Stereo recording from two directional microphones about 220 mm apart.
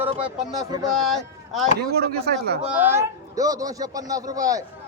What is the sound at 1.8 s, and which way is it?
Speech, 45° right (ahead or behind).